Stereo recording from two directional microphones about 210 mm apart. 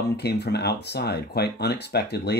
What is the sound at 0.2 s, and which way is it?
Speech, 50° left (ahead or behind).